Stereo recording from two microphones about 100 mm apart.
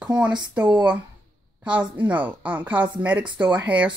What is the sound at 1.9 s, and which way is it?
A woman's voice, 15° right (ahead or behind).